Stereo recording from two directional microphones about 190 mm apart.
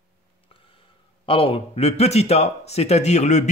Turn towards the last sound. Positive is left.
turn(degrees=35)  # may be behind; listen again after turning